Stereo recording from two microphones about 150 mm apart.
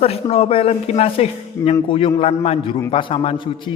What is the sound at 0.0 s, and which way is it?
A man's voice, 40° left (ahead or behind).